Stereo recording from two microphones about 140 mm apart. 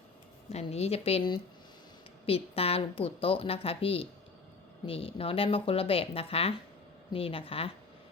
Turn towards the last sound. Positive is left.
turn(degrees=40)  # may be behind; listen again after turning